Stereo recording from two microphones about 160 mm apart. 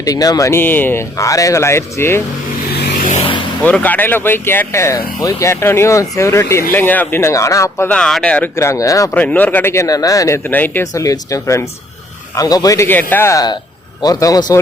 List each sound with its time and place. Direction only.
0.0 s speech: 25° left (ahead or behind)
3.2 s vehicle: 30° left (ahead or behind)
3.6 s speech: 10° left (ahead or behind)
7.9 s speech: 5° left (ahead or behind)
8.5 s speech: 20° left (ahead or behind)
9.1 s speech: 10° left (ahead or behind)